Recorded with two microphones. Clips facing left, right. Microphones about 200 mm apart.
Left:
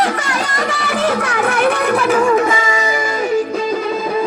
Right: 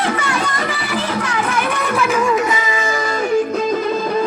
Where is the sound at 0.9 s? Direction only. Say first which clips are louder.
Left 4 dB; 60° left (ahead or behind).